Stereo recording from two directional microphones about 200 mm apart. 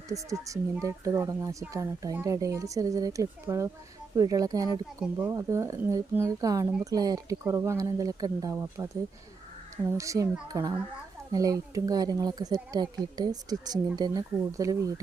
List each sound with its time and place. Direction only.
0.1 s a child's voice: 15° right (ahead or behind)
10.0 s a child's voice: 15° right (ahead or behind)